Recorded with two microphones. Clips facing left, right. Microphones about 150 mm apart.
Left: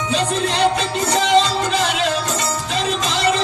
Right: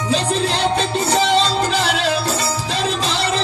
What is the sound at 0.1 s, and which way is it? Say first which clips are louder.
Music: right 2 dB; 35° right (ahead or behind).